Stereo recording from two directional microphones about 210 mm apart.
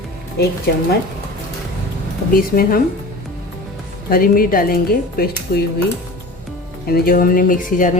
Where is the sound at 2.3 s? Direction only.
45° left (ahead or behind).